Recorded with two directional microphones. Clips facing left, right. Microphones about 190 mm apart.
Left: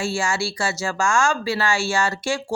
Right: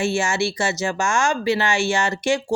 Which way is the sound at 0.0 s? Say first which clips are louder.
Right 3 dB; 20° right (ahead or behind).